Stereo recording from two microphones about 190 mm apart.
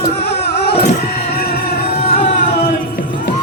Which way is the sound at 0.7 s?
35° left (ahead or behind).